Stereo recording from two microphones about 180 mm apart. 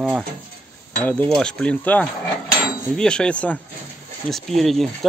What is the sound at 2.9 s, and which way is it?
Speech, 5° left (ahead or behind).